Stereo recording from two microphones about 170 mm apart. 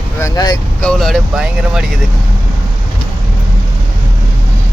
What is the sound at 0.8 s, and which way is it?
Speech, 5° left (ahead or behind).